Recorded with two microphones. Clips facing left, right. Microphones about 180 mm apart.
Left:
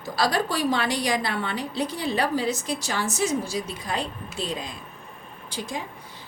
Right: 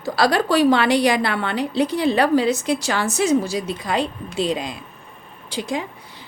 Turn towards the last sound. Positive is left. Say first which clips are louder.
# right 7 dB
turn(degrees=-80)